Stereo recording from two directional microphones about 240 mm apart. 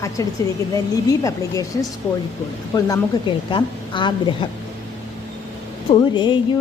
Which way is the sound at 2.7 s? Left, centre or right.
Centre.